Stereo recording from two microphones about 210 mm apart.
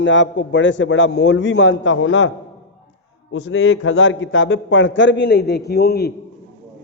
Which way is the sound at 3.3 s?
70° left (ahead or behind).